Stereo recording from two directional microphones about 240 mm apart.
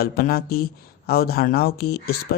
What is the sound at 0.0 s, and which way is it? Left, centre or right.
Speech, left.